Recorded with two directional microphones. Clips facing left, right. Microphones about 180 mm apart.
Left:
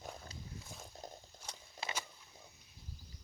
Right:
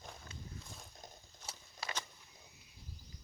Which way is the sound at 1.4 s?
10° left (ahead or behind).